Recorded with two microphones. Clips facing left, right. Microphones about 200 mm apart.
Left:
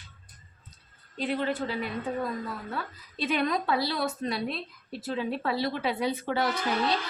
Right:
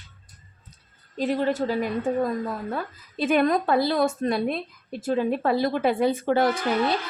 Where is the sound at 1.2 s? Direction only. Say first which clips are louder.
Right 5 dB; 40° right (ahead or behind).